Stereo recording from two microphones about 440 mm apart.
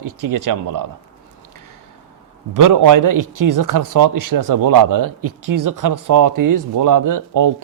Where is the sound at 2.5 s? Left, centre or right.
Right.